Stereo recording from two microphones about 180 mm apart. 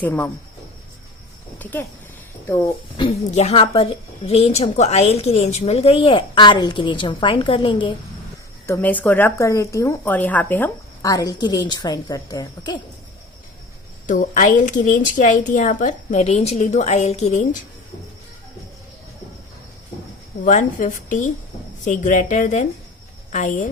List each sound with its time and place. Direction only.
0.0 s speech: 10° left (ahead or behind)
3.0 s a woman's voice: 35° left (ahead or behind)
8.6 s speech: 10° left (ahead or behind)
14.1 s speech: 45° left (ahead or behind)
20.4 s speech: 45° left (ahead or behind)